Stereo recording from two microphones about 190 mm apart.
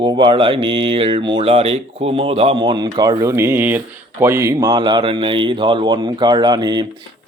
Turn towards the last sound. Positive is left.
turn(degrees=-20)  # may be behind; listen again after turning